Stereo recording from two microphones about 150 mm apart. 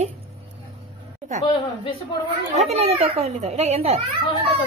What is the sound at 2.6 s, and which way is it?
A woman's voice, 45° right (ahead or behind).